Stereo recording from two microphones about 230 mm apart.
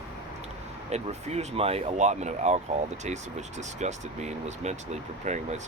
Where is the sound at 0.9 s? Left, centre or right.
Right.